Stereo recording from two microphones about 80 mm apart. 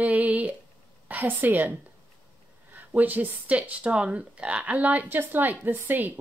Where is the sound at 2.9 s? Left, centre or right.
Right.